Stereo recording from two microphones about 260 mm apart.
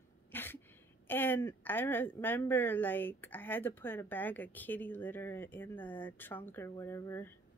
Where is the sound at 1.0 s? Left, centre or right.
Centre.